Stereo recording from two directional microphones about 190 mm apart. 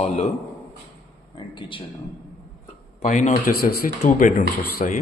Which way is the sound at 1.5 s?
25° left (ahead or behind).